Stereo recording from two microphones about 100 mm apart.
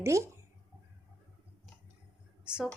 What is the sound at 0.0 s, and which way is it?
Speech, 30° right (ahead or behind).